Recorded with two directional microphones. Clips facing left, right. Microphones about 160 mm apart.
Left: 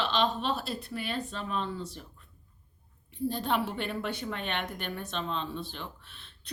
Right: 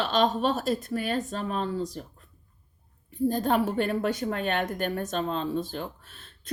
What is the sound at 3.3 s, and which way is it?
A woman's voice, 45° right (ahead or behind).